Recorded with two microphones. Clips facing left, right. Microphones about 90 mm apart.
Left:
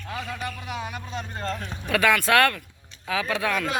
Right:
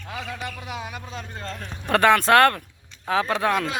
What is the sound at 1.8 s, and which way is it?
Speech, 45° right (ahead or behind).